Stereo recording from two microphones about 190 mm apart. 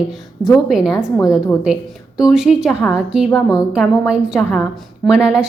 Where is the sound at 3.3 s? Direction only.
15° left (ahead or behind).